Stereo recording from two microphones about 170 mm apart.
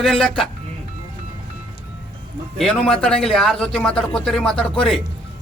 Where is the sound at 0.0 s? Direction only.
Centre (ahead or behind).